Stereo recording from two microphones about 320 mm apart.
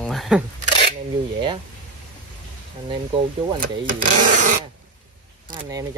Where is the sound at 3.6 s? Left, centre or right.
Right.